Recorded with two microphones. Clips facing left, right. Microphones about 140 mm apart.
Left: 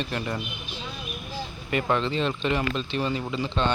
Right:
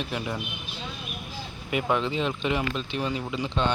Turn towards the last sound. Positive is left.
turn(degrees=-15)  # may be behind; listen again after turning